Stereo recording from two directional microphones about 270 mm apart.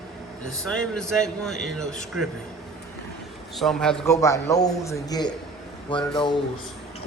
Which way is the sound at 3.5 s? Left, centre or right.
Centre.